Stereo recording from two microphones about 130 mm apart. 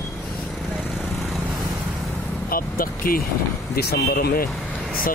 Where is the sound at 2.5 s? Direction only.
90° left.